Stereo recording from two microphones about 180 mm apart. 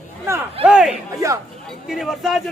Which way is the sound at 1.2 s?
15° right (ahead or behind).